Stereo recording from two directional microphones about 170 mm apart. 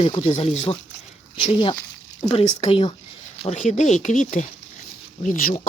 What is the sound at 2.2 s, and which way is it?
Speech, 35° left (ahead or behind).